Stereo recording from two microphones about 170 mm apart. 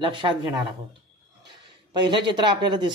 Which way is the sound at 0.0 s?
30° right (ahead or behind).